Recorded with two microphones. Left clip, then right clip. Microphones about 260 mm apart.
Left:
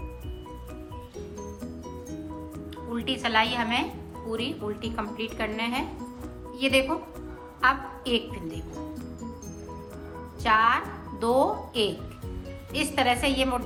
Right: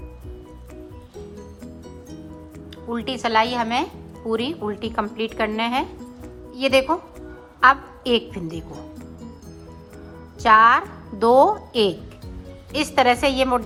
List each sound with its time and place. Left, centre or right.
2.9 s a woman's voice: centre
10.4 s a woman's voice: centre